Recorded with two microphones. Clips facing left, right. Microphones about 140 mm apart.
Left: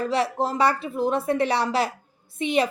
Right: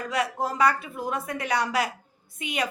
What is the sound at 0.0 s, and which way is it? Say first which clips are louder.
Speech: left 4 dB; 30° left (ahead or behind).